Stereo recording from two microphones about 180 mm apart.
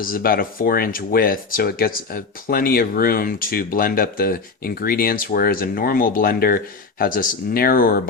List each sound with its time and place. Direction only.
0.0 s speech: 55° left (ahead or behind)